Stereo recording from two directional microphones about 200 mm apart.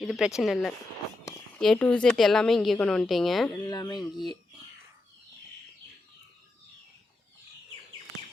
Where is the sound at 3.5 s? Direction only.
15° left (ahead or behind).